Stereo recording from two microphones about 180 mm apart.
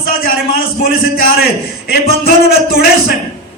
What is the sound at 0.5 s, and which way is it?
Speech, 55° left (ahead or behind).